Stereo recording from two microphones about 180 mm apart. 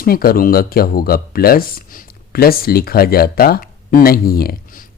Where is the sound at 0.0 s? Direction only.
55° left (ahead or behind).